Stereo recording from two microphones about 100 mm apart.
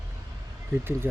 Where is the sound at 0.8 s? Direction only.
25° right (ahead or behind).